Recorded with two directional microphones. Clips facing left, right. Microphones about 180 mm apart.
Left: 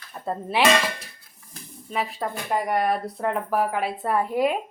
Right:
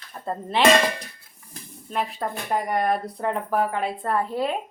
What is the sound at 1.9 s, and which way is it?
A woman's voice, centre (ahead or behind).